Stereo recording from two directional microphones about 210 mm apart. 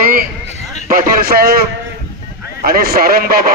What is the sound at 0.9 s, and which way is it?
Speech, 40° right (ahead or behind).